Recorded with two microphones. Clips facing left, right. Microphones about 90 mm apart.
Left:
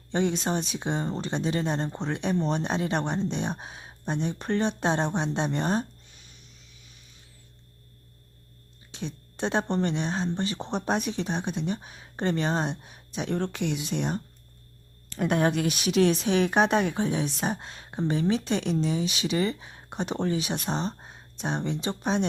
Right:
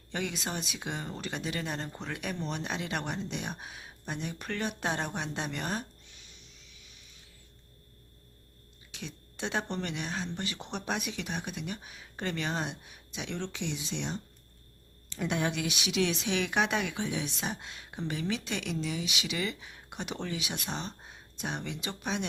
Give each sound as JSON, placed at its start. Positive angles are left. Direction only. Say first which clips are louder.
{"t": 0.1, "sound": "speech", "louder": "left 9 dB", "side_deg": 30}
{"t": 8.9, "sound": "speech", "louder": "left 7 dB", "side_deg": 35}